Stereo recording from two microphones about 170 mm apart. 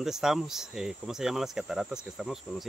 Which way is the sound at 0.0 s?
5° right (ahead or behind).